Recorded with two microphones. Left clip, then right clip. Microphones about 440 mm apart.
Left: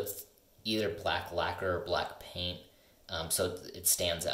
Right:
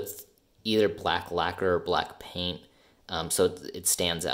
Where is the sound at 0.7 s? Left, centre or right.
Centre.